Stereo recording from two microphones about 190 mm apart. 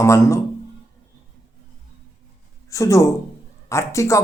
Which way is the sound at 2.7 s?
15° left (ahead or behind).